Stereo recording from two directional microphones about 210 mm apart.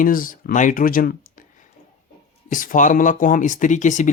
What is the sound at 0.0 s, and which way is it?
Speech, 40° left (ahead or behind).